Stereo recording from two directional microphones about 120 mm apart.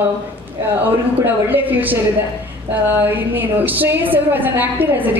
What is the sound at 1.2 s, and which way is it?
A woman's voice, 15° right (ahead or behind).